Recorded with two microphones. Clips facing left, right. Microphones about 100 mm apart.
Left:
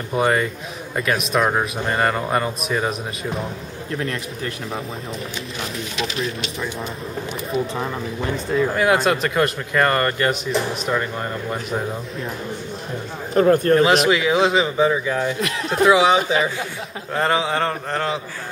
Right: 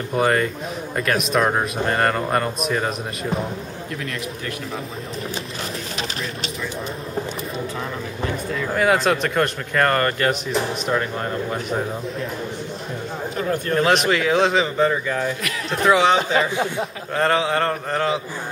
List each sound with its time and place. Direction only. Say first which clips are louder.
0.1 s speech: even; 5° left (ahead or behind)
3.9 s speech: left 5 dB; 35° left (ahead or behind)
8.7 s speech: right 3 dB; centre (ahead or behind)
13.3 s a man's voice: left 10 dB; 45° left (ahead or behind)
13.7 s speech: left 2 dB; centre (ahead or behind)